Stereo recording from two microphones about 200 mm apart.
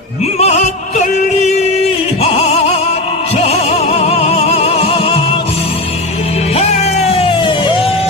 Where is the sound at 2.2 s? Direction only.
30° left (ahead or behind).